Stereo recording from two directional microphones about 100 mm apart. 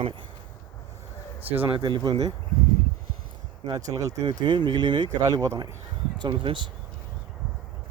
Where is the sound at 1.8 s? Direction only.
40° right (ahead or behind).